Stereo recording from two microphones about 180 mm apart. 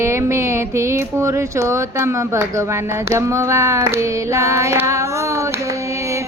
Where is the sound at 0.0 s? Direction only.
15° right (ahead or behind).